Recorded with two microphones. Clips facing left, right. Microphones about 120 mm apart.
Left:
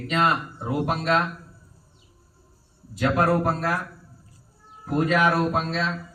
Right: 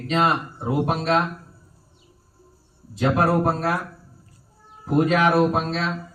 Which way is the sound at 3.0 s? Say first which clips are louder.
Right 2 dB; 20° right (ahead or behind).